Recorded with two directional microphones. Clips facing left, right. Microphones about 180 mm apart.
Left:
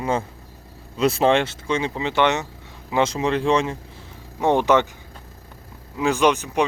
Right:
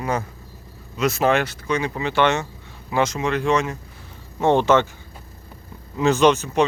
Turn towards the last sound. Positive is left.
turn(degrees=15)  # may be behind; listen again after turning